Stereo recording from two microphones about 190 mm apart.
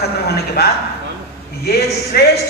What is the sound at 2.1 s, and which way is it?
Speech, 55° left (ahead or behind).